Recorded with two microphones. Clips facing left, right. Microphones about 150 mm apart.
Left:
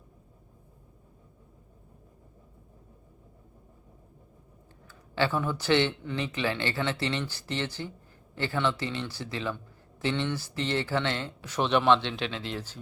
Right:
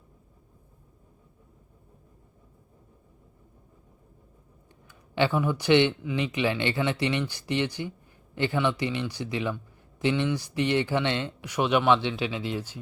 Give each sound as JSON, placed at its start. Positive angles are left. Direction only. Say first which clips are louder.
{"t": 5.1, "sound": "speech", "louder": "right 3 dB", "side_deg": -15}